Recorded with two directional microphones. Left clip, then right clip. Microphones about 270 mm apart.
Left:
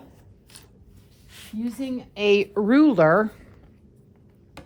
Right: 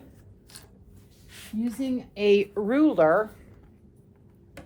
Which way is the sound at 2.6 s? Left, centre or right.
Left.